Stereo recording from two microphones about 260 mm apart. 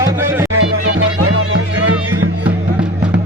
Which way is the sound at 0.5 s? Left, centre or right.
Right.